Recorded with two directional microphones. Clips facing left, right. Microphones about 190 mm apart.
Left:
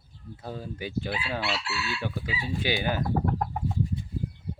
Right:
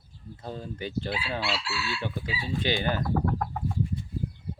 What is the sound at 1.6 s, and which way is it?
Chicken, 20° left (ahead or behind).